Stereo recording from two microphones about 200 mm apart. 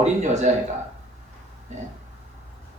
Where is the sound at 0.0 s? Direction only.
35° right (ahead or behind).